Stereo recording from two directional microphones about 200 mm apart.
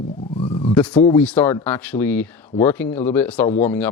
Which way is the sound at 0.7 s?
5° left (ahead or behind).